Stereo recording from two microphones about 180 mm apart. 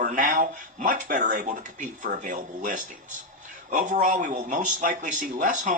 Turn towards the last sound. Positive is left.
turn(degrees=-45)  # may be behind; listen again after turning